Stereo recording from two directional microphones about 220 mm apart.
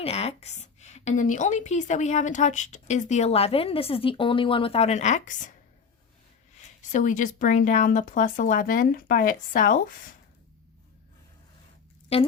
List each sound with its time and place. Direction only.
0.0 s speech: 25° left (ahead or behind)
6.9 s speech: 35° left (ahead or behind)
12.1 s a woman's voice: 25° left (ahead or behind)